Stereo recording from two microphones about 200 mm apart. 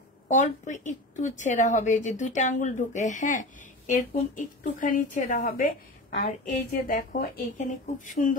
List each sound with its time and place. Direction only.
0.3 s a woman's voice: 40° left (ahead or behind)